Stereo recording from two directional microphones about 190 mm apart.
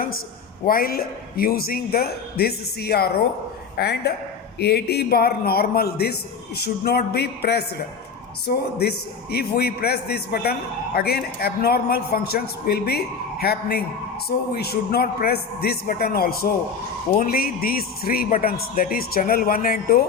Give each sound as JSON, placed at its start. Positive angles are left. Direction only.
{"t": 0.6, "sound": "a man's voice", "side_deg": 50}